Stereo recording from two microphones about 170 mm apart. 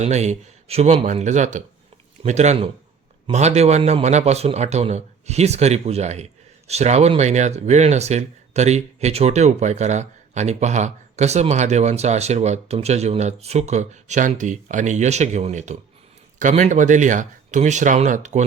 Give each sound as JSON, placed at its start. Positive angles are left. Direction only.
{"t": 0.0, "sound": "a man's voice", "side_deg": -40}